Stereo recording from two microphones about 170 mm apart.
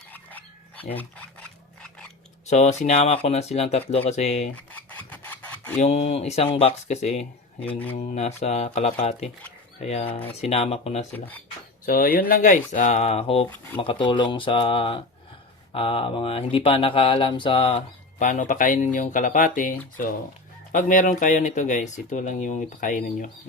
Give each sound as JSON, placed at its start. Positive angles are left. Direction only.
{"t": 0.1, "sound": "a sound", "side_deg": 10}
{"t": 2.5, "sound": "speech", "side_deg": 40}
{"t": 4.5, "sound": "filing", "side_deg": 10}
{"t": 5.8, "sound": "speech", "side_deg": 40}
{"t": 7.6, "sound": "speech", "side_deg": 10}
{"t": 7.9, "sound": "speech", "side_deg": 40}
{"t": 11.9, "sound": "speech", "side_deg": 60}
{"t": 18.2, "sound": "speech", "side_deg": 45}
{"t": 20.7, "sound": "speech", "side_deg": 50}